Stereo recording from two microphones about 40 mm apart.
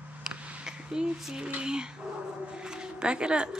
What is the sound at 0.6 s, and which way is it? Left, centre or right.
Speech, centre.